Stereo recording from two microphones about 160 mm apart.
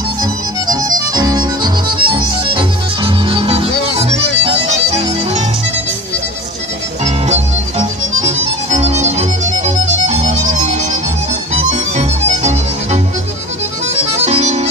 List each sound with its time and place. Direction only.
0.2 s music: 25° right (ahead or behind)
7.8 s music: 45° right (ahead or behind)
14.2 s music: 45° right (ahead or behind)